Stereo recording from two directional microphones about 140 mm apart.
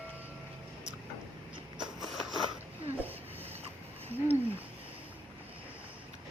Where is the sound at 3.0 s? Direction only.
15° right (ahead or behind).